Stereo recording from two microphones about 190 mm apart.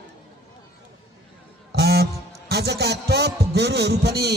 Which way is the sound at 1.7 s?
55° right (ahead or behind).